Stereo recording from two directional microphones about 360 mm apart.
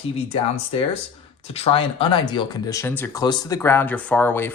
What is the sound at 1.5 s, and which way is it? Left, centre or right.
Speech, centre.